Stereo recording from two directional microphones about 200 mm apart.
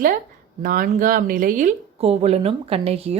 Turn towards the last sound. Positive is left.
turn(degrees=-30)  # may be behind; listen again after turning